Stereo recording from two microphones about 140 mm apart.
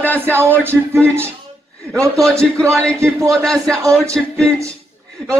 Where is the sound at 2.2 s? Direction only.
5° left (ahead or behind).